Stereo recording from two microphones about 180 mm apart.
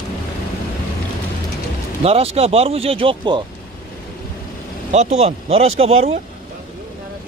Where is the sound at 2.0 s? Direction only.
35° right (ahead or behind).